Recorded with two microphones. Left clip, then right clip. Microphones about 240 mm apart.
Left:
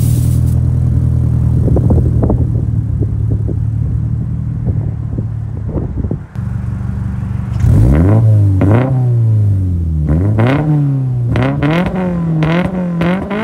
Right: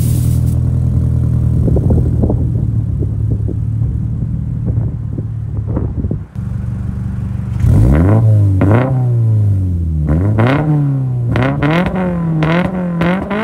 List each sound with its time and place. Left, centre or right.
0.0 s vehicle: centre
2.2 s vehicle: right
7.6 s vehicle: centre
10.0 s vehicle: centre